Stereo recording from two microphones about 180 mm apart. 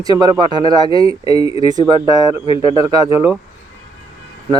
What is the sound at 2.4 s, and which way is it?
Speech, 30° left (ahead or behind).